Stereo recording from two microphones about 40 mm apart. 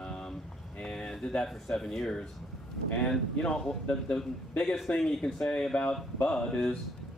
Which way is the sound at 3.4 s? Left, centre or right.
Centre.